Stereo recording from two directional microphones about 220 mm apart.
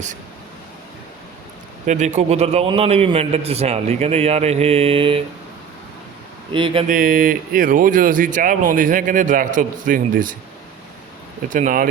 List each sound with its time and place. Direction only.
1.9 s a man's voice: 30° right (ahead or behind)
6.5 s a man's voice: 25° right (ahead or behind)
6.8 s speech: 40° right (ahead or behind)
11.4 s speech: 35° right (ahead or behind)